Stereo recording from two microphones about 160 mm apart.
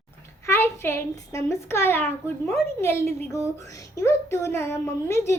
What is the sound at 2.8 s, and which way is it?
A child's voice, 15° left (ahead or behind).